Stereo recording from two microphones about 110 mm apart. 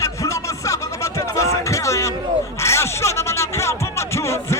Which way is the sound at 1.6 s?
25° left (ahead or behind).